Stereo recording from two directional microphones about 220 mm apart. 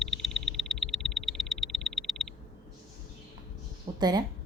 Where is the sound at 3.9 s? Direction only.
20° right (ahead or behind).